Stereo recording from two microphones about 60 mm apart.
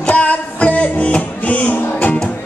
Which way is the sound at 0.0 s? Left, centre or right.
Left.